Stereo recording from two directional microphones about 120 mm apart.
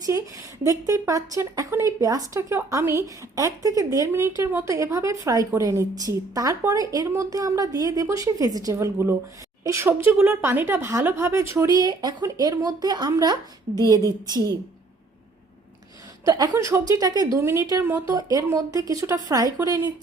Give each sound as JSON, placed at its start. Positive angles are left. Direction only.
{"t": 0.0, "sound": "a woman's voice", "side_deg": -30}
{"t": 16.2, "sound": "a woman's voice", "side_deg": -30}
{"t": 18.1, "sound": "a woman's voice", "side_deg": -30}